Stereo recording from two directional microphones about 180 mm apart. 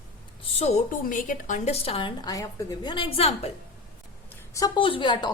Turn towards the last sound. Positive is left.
turn(degrees=25)  # may be behind; listen again after turning